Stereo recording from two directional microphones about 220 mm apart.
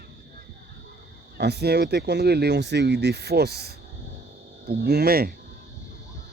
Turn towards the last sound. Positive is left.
turn(degrees=-45)  # may be behind; listen again after turning